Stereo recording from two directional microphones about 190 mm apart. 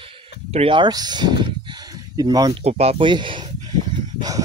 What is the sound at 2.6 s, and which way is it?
Speech, 35° right (ahead or behind).